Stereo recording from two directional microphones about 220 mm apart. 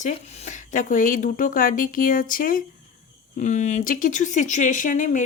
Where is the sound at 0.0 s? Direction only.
30° left (ahead or behind).